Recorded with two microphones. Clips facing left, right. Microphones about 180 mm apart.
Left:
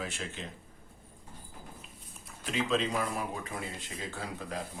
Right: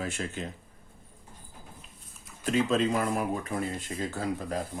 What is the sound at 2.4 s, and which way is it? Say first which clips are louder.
Speech: right 5 dB; 45° right (ahead or behind).